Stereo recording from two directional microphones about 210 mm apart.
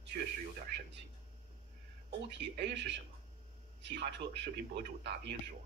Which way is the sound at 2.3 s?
55° right (ahead or behind).